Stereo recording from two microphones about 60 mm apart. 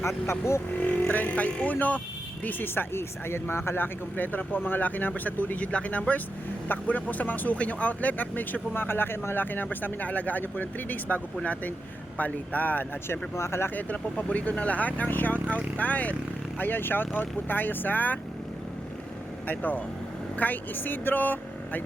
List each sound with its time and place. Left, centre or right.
0.3 s speech: left
0.8 s speech: left
13.1 s speech: left
13.7 s speech: left
19.5 s speech: left